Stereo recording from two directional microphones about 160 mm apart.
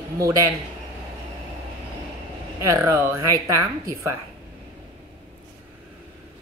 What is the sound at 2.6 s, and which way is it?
Speech, 20° right (ahead or behind).